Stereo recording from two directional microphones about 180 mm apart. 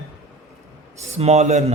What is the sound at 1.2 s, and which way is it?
Speech, 35° right (ahead or behind).